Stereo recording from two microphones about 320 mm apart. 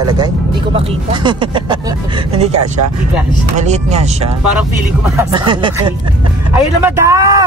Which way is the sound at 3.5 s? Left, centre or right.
Right.